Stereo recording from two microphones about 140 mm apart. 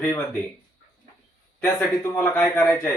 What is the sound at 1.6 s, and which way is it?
Speech, 20° left (ahead or behind).